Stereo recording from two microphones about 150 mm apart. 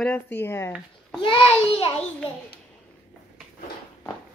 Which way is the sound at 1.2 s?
35° left (ahead or behind).